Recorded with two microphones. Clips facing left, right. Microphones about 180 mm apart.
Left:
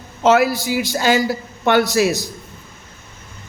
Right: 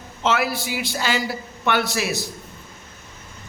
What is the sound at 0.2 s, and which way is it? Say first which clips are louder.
A man's voice: left 8 dB; 40° left (ahead or behind).